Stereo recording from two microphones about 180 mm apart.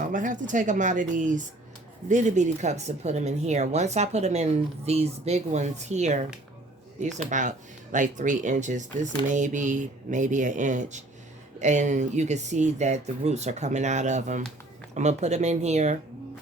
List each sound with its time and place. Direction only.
0.0 s speech: 45° right (ahead or behind)